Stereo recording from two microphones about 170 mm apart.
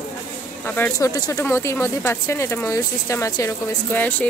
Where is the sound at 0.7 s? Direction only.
15° left (ahead or behind).